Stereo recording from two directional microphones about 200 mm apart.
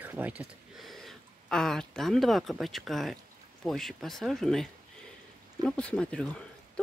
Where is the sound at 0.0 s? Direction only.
10° right (ahead or behind).